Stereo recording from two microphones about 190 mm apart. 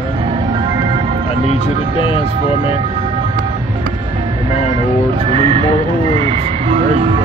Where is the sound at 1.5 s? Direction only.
30° left (ahead or behind).